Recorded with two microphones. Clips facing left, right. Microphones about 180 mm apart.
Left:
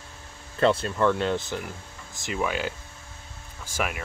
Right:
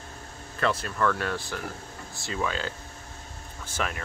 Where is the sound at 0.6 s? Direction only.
25° left (ahead or behind).